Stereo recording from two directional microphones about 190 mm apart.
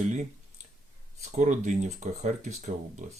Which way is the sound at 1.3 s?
40° right (ahead or behind).